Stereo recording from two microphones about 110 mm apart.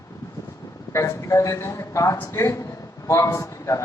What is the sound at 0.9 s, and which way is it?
A man's voice, 25° left (ahead or behind).